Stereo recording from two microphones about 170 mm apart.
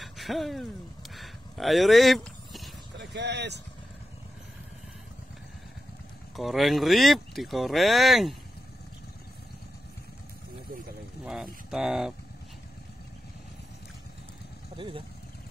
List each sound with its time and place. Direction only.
0.0 s a sound: centre (ahead or behind)
3.0 s speech: 90° right
6.3 s speech: centre (ahead or behind)
11.2 s speech: 5° right (ahead or behind)
14.8 s speech: 30° right (ahead or behind)